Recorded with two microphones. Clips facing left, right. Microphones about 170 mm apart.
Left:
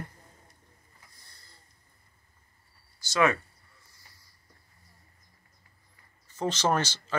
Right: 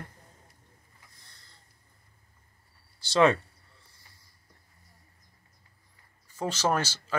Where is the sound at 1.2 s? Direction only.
5° left (ahead or behind).